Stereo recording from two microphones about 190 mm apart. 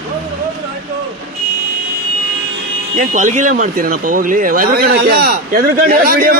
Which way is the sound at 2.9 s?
40° right (ahead or behind).